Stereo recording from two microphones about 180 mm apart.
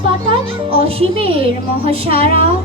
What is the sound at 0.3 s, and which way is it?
A child's voice, 30° right (ahead or behind).